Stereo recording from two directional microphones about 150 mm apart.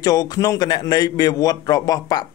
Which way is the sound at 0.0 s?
25° left (ahead or behind).